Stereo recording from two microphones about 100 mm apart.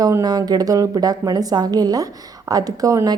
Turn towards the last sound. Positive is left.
turn(degrees=-40)  # may be behind; listen again after turning